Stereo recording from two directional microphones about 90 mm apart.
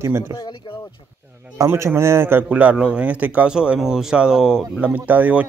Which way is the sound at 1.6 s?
30° right (ahead or behind).